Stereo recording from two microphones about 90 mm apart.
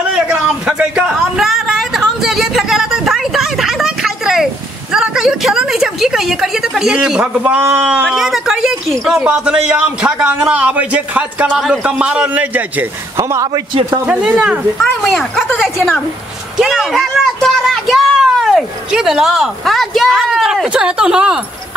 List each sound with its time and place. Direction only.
0.3 s a sound: 15° right (ahead or behind)
7.7 s speech: 10° right (ahead or behind)
9.2 s a man's voice: 15° right (ahead or behind)
13.2 s a man's voice: 35° right (ahead or behind)
13.8 s a man's voice: 10° right (ahead or behind)
15.0 s a man's voice: 5° left (ahead or behind)